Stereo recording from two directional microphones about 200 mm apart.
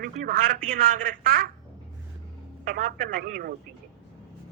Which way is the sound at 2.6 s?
45° right (ahead or behind).